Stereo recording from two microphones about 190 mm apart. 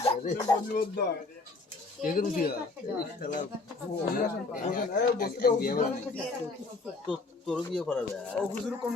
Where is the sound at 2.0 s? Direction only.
45° left (ahead or behind).